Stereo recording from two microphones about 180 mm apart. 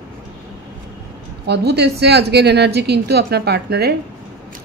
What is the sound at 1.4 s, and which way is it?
A woman's voice, 70° right (ahead or behind).